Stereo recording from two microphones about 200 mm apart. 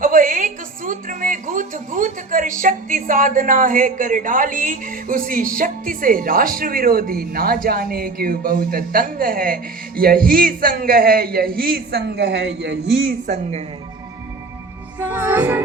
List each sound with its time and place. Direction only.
0.0 s a woman's voice: 40° right (ahead or behind)
14.9 s music: 10° right (ahead or behind)